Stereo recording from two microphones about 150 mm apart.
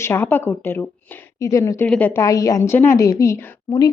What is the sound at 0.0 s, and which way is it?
A woman's voice, 15° left (ahead or behind).